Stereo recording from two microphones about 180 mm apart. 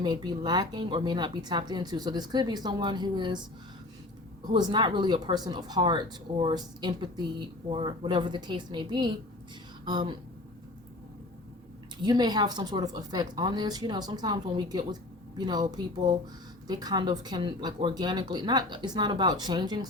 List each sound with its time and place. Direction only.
0.0 s speech: 25° right (ahead or behind)
4.5 s speech: 25° right (ahead or behind)
12.0 s speech: 20° right (ahead or behind)